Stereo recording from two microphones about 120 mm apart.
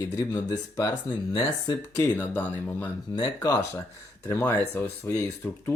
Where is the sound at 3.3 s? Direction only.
30° left (ahead or behind).